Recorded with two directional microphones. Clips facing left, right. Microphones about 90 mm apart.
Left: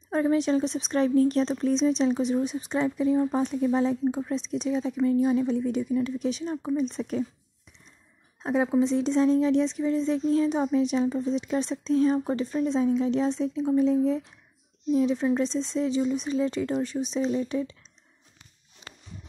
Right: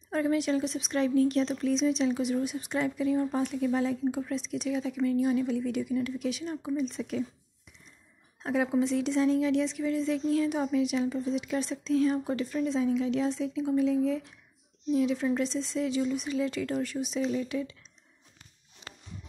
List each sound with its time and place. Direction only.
0.1 s speech: 30° left (ahead or behind)
6.8 s speech: 35° left (ahead or behind)
8.4 s speech: 25° left (ahead or behind)